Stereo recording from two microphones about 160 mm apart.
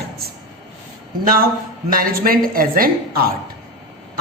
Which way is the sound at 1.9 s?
65° right (ahead or behind).